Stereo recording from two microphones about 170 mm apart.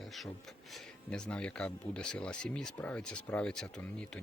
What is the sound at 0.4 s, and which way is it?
Speech, centre (ahead or behind).